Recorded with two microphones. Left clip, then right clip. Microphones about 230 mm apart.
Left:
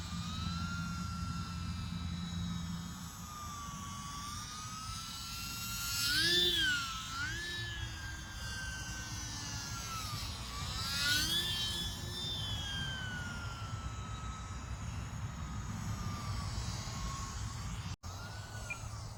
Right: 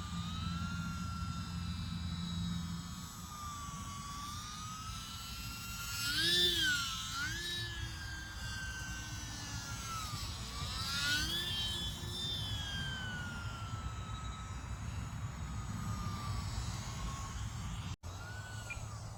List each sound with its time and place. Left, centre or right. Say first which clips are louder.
0.1 s vehicle: left 3 dB; left
5.6 s a sound: left 3 dB; left
6.4 s music: even; centre
9.8 s vehicle: left 1 dB; centre
10.9 s music: left 3 dB; left
12.1 s music: even; centre